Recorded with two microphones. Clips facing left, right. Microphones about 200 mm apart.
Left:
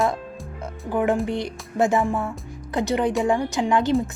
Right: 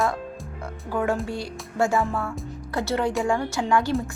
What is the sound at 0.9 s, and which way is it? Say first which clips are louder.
Speech: left 4 dB; 20° left (ahead or behind).